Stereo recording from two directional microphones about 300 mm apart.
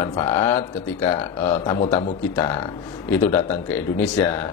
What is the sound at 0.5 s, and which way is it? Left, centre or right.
Speech, centre.